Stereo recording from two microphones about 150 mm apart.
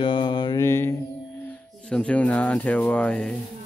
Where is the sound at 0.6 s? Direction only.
15° left (ahead or behind).